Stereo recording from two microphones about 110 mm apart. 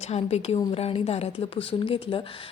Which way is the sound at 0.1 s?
80° left.